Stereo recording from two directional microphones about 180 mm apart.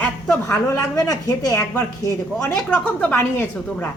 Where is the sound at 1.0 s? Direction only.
20° left (ahead or behind).